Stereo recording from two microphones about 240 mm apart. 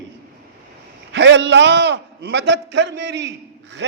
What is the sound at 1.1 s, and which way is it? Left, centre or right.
A man's voice, right.